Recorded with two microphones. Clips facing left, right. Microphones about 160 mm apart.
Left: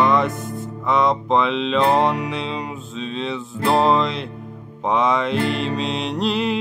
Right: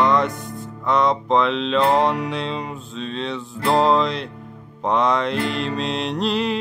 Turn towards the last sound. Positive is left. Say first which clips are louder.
# left 1 dB
turn(degrees=0)  # may be behind; listen again after turning